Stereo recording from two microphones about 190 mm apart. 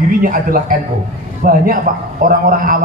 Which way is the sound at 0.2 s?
45° right (ahead or behind).